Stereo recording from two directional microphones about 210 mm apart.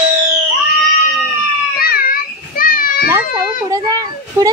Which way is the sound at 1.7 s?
45° left (ahead or behind).